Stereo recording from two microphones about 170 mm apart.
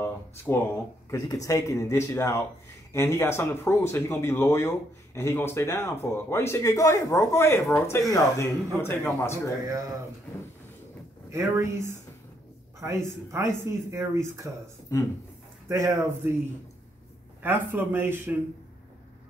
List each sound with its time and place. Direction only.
0.0 s speech: 10° left (ahead or behind)
11.3 s speech: 15° right (ahead or behind)
15.7 s speech: 15° right (ahead or behind)
17.4 s speech: 10° right (ahead or behind)